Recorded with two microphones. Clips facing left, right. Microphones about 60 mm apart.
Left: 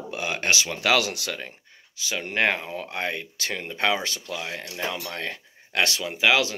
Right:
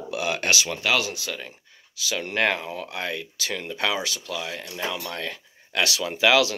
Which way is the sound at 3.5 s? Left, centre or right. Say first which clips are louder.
Left 2 dB; left.